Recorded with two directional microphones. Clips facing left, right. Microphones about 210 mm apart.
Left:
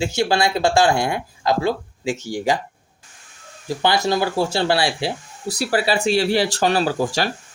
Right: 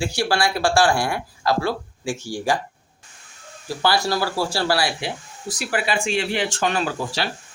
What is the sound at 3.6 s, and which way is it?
Speech, 20° left (ahead or behind).